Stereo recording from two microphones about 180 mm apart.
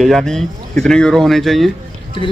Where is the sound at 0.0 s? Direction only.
Centre (ahead or behind).